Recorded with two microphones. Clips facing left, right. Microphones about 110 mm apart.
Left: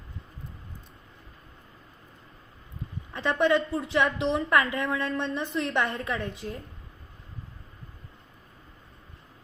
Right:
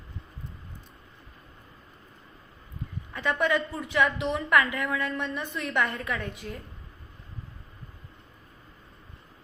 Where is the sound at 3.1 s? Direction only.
30° left (ahead or behind).